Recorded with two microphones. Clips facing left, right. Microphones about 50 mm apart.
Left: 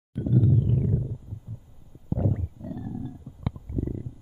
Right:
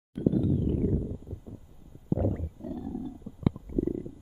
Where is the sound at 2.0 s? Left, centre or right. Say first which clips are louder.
Even; centre.